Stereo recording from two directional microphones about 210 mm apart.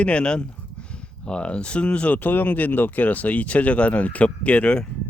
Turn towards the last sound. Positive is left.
turn(degrees=5)  # may be behind; listen again after turning